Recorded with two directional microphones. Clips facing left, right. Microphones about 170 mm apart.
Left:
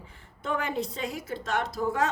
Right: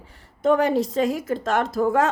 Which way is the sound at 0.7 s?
90° right.